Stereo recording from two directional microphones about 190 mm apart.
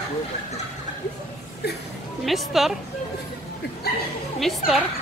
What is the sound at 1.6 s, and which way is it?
Speech, 60° left (ahead or behind).